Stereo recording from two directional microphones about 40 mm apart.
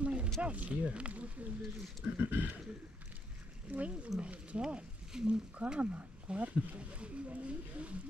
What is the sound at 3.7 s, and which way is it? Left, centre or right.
Speech, right.